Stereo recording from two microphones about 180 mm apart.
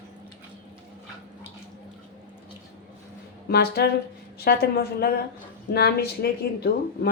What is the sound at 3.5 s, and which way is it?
Speech, 65° left (ahead or behind).